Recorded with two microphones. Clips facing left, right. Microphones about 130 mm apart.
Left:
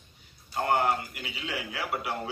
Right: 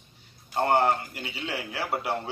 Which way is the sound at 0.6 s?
30° right (ahead or behind).